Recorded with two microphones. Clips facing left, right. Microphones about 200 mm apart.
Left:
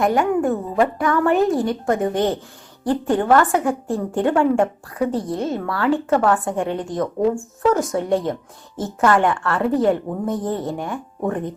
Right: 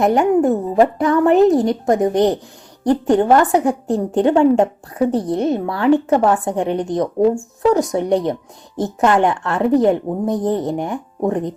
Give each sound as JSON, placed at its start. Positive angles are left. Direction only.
{"t": 0.0, "sound": "a woman's voice", "side_deg": -20}